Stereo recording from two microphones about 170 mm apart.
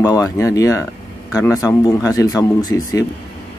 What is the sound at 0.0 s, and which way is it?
Speech, 20° left (ahead or behind).